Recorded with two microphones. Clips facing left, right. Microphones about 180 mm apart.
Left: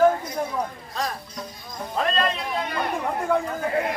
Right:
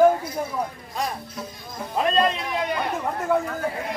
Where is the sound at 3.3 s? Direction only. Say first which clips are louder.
Right 1 dB; 5° right (ahead or behind).